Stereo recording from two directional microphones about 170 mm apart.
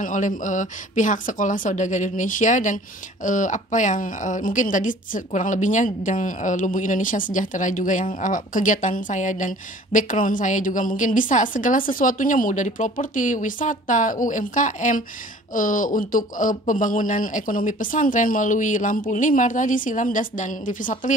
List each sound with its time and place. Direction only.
0.0 s a woman's voice: 50° left (ahead or behind)